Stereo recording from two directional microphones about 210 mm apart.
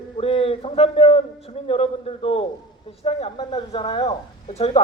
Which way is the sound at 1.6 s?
25° left (ahead or behind).